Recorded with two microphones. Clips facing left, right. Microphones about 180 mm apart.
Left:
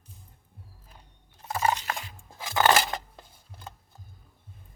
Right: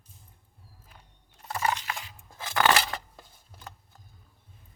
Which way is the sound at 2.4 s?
20° left (ahead or behind).